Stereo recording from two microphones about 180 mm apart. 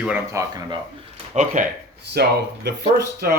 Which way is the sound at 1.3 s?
45° right (ahead or behind).